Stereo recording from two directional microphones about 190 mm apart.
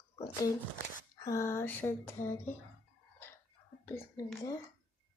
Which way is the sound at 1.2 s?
15° left (ahead or behind).